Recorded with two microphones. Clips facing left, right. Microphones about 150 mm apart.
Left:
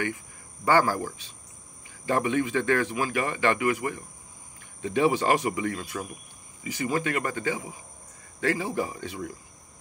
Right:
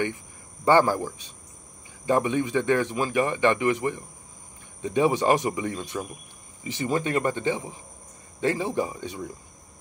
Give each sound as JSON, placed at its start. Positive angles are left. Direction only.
{"t": 0.7, "sound": "speech", "side_deg": -20}